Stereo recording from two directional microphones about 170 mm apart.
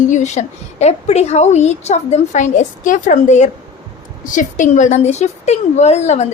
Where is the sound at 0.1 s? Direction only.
45° left (ahead or behind).